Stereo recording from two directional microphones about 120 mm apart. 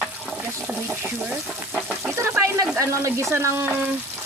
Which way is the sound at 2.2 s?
20° right (ahead or behind).